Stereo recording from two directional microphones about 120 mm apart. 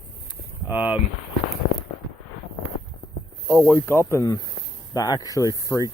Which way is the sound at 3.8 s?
20° left (ahead or behind).